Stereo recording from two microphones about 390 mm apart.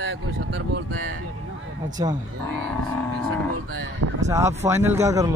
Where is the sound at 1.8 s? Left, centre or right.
Centre.